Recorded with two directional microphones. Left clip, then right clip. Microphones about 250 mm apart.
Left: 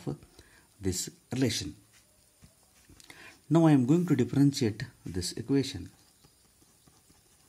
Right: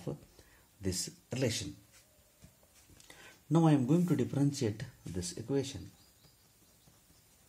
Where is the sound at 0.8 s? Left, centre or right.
Left.